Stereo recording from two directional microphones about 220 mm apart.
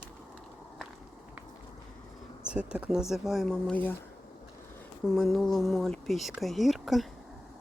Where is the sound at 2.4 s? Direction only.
5° right (ahead or behind).